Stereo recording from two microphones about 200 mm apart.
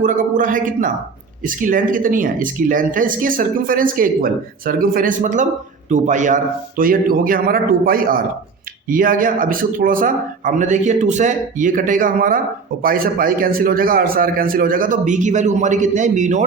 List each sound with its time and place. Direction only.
0.0 s a man's voice: 40° right (ahead or behind)